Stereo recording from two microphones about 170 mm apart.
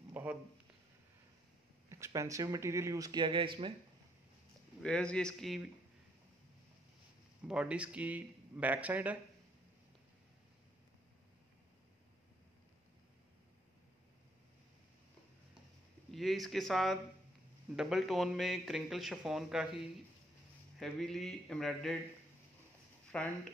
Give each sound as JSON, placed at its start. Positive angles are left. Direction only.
{"t": 0.1, "sound": "speech", "side_deg": -10}
{"t": 1.9, "sound": "speech", "side_deg": -15}
{"t": 4.8, "sound": "speech", "side_deg": 5}
{"t": 7.4, "sound": "speech", "side_deg": -5}
{"t": 16.1, "sound": "speech", "side_deg": 0}
{"t": 23.1, "sound": "speech", "side_deg": 5}